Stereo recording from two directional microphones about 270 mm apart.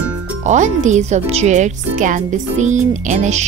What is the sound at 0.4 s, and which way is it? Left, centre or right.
Speech, right.